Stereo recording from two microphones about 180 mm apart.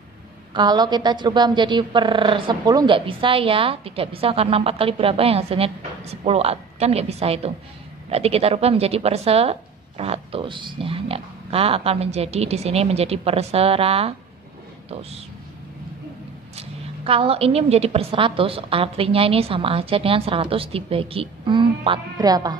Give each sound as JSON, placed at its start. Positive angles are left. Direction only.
{"t": 0.5, "sound": "a woman's voice", "side_deg": -25}
{"t": 16.5, "sound": "a woman's voice", "side_deg": -30}